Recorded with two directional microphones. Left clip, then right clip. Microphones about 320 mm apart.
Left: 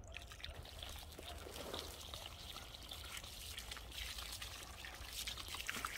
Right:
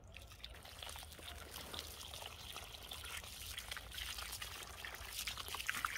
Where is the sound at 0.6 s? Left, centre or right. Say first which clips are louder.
Right 1 dB; centre.